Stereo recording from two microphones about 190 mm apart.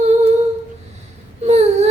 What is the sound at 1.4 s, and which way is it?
Whimper, 35° right (ahead or behind).